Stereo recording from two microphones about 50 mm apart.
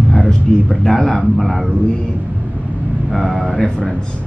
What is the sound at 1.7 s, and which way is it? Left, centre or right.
Speech, centre.